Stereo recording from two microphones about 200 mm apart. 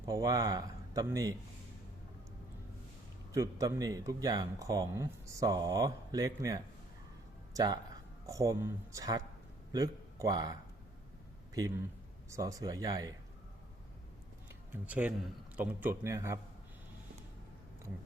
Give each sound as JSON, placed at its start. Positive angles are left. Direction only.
{"t": 0.1, "sound": "speech", "side_deg": -20}
{"t": 3.3, "sound": "speech", "side_deg": -15}
{"t": 12.3, "sound": "speech", "side_deg": -15}
{"t": 14.7, "sound": "speech", "side_deg": -10}